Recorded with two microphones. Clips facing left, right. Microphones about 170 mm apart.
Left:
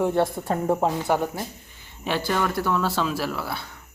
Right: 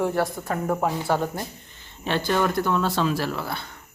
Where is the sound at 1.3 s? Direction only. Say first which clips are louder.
Even; 5° left (ahead or behind).